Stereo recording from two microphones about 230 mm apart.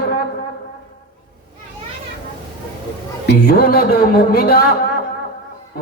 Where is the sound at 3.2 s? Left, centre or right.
Left.